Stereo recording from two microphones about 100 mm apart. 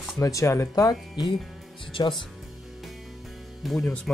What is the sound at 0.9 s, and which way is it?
Speech, 40° left (ahead or behind).